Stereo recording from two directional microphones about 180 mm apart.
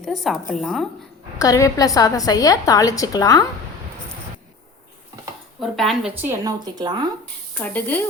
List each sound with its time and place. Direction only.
0.0 s a woman's voice: centre (ahead or behind)
1.4 s a woman's voice: 15° left (ahead or behind)
5.5 s a woman's voice: centre (ahead or behind)
6.4 s speech: 20° right (ahead or behind)
7.5 s speech: 10° left (ahead or behind)